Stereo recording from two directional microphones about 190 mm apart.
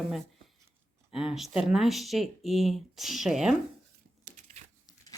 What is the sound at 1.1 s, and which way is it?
Speech, centre (ahead or behind).